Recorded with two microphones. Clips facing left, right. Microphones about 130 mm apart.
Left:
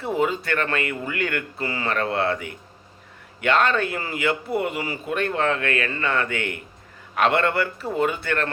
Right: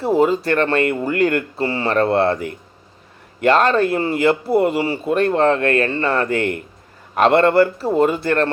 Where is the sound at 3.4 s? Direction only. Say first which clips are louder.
Right 6 dB; 35° right (ahead or behind).